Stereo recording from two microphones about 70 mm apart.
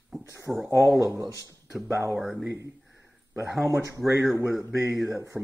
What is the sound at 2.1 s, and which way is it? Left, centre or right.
Speech, centre.